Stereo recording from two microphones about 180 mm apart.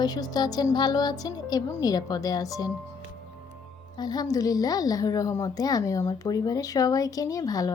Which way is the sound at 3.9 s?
20° left (ahead or behind).